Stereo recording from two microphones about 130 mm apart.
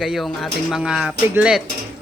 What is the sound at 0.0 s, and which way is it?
Speech, centre (ahead or behind).